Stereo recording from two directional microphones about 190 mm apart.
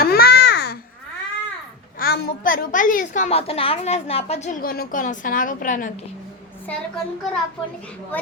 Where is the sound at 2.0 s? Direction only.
55° left (ahead or behind).